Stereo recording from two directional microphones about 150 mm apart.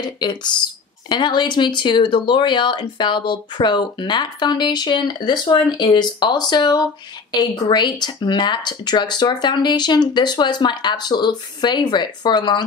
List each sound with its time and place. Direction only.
0.0 s speech: 30° left (ahead or behind)